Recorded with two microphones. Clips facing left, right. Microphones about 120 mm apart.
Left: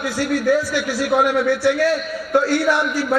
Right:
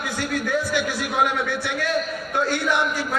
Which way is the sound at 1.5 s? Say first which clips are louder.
Left 8 dB; 20° right (ahead or behind).